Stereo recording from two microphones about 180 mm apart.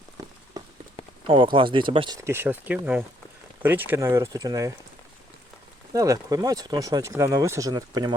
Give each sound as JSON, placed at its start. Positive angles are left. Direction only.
{"t": 1.0, "sound": "a sound", "side_deg": 30}
{"t": 1.5, "sound": "speech", "side_deg": -30}
{"t": 5.9, "sound": "speech", "side_deg": -20}